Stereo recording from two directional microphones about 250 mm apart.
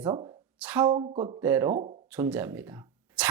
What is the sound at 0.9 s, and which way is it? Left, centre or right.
Speech, centre.